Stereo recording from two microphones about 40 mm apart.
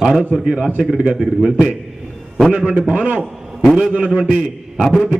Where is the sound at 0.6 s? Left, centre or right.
Right; by 1.7 s centre.